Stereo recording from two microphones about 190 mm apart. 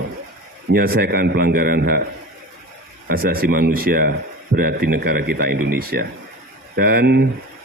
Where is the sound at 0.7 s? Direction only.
55° right (ahead or behind).